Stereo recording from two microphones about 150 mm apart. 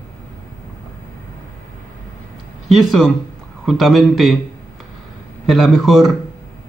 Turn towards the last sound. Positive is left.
turn(degrees=0)  # may be behind; listen again after turning